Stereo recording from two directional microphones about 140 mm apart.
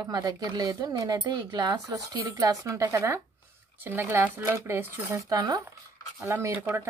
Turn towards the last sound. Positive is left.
turn(degrees=-20)  # may be behind; listen again after turning